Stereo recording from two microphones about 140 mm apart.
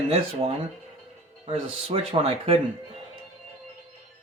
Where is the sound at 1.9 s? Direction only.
45° right (ahead or behind).